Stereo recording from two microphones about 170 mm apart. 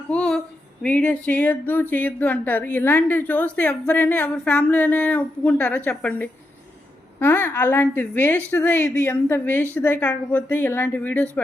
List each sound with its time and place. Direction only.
0.1 s speech: 5° left (ahead or behind)